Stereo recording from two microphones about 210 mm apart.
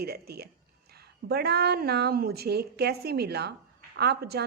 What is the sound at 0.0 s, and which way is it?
Speech, 50° right (ahead or behind).